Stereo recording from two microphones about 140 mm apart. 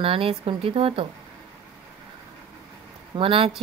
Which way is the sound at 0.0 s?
40° right (ahead or behind).